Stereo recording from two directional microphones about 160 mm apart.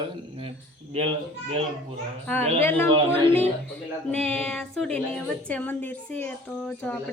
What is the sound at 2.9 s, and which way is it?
Speech, 35° right (ahead or behind).